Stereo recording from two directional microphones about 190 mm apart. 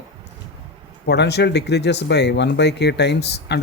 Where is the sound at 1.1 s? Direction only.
60° left (ahead or behind).